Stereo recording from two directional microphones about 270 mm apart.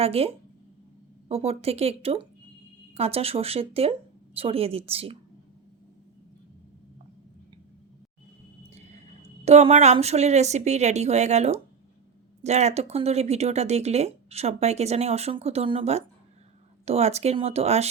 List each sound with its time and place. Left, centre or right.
0.0 s speech: right
9.4 s speech: right